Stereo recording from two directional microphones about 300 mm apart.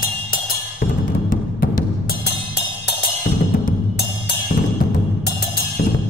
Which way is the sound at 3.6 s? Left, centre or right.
Left.